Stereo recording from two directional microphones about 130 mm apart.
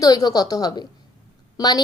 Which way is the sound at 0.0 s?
30° left (ahead or behind).